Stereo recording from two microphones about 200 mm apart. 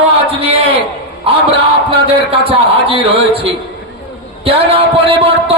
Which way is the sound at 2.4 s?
30° right (ahead or behind).